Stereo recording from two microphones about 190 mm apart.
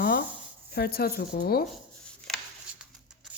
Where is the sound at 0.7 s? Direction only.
55° left (ahead or behind).